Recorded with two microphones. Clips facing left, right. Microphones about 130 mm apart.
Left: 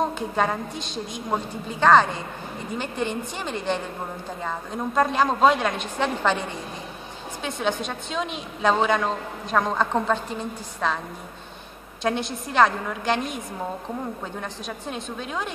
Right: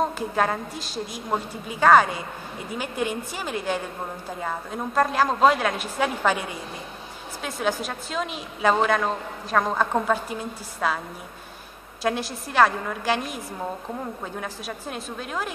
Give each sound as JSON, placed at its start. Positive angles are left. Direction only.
{"t": 0.0, "sound": "a woman's voice", "side_deg": 0}
{"t": 12.0, "sound": "a woman's voice", "side_deg": -5}